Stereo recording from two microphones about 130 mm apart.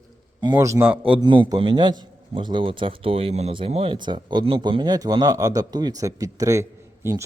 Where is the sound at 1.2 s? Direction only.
35° right (ahead or behind).